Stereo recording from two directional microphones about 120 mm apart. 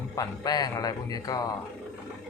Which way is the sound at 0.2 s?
30° left (ahead or behind).